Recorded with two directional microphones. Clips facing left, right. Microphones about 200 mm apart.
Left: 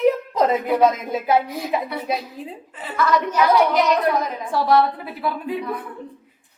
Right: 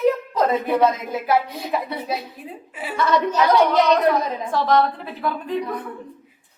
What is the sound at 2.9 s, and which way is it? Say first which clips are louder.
Speech: even; 25° right (ahead or behind).